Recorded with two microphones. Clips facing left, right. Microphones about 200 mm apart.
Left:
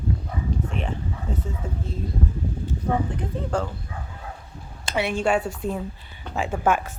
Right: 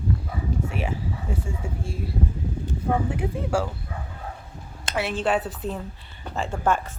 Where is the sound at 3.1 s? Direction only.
10° right (ahead or behind).